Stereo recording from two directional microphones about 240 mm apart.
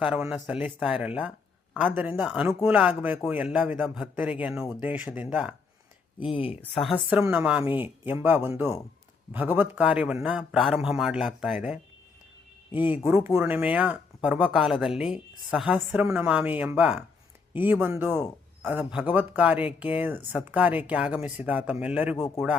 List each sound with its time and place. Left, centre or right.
0.0 s speech: centre
6.2 s speech: left
6.6 s speech: centre